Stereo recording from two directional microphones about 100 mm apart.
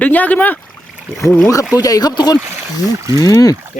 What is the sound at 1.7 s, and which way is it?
Speech, 35° left (ahead or behind).